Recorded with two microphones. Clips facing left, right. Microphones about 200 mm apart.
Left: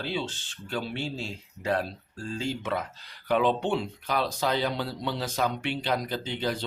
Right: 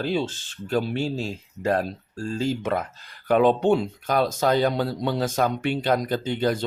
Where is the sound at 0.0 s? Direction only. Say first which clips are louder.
Right 7 dB; 45° right (ahead or behind).